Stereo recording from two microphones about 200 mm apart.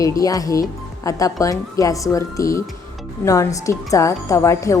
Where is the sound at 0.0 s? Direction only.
15° left (ahead or behind).